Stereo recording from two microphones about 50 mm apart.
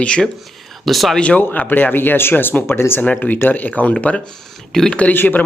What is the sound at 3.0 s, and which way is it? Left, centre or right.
Speech, left.